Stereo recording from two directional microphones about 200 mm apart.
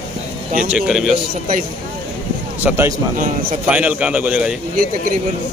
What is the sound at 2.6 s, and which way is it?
A man's voice, 10° right (ahead or behind).